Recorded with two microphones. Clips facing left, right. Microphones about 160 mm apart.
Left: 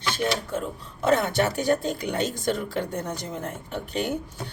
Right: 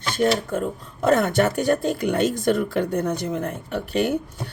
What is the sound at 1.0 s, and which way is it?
Speech, 50° right (ahead or behind).